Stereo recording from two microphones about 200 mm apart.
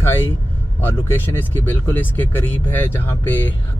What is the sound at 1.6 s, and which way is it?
Speech, 10° left (ahead or behind).